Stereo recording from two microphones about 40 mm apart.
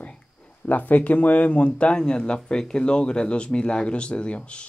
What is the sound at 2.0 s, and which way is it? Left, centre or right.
Speech, centre.